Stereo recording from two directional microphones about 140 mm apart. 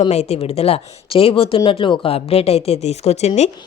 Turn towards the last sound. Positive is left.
turn(degrees=50)  # may be behind; listen again after turning